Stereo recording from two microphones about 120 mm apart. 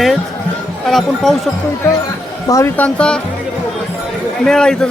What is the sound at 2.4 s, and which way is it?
Speech, 25° left (ahead or behind).